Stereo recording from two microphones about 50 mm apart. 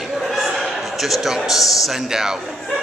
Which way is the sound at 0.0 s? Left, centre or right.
Centre.